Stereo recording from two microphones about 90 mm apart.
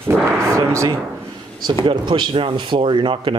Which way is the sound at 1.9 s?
60° right (ahead or behind).